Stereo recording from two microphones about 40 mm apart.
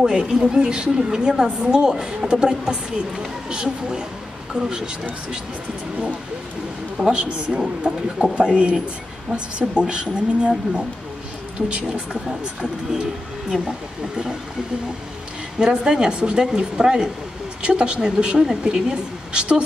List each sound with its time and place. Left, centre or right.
0.0 s a woman's voice: right
7.0 s a woman's voice: right
11.7 s a woman's voice: right
13.5 s a woman's voice: centre
15.6 s a woman's voice: right